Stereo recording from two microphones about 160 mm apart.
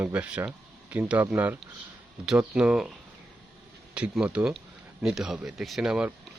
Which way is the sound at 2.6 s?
5° right (ahead or behind).